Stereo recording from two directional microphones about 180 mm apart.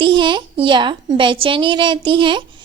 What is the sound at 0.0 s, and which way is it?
A woman's voice, 25° right (ahead or behind).